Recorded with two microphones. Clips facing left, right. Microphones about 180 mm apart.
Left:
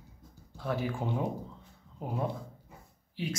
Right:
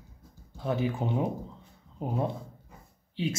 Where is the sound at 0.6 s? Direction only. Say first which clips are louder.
Right 4 dB; 20° right (ahead or behind).